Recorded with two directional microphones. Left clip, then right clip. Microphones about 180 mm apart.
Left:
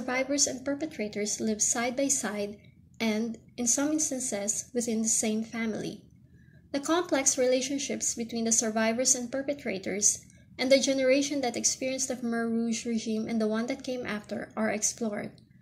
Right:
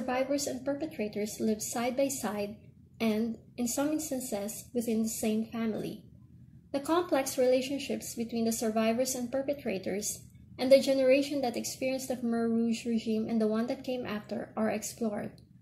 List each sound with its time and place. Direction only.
0.0 s a woman's voice: 20° left (ahead or behind)